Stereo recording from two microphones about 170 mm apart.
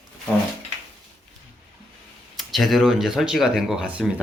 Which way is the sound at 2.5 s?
Centre (ahead or behind).